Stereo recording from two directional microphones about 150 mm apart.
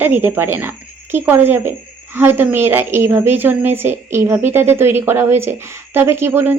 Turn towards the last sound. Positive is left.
turn(degrees=-15)  # may be behind; listen again after turning